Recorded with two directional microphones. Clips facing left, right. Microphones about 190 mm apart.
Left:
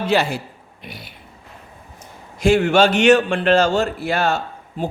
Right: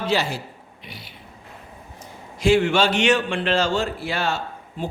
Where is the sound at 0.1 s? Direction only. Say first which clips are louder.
Left 4 dB; 55° left (ahead or behind).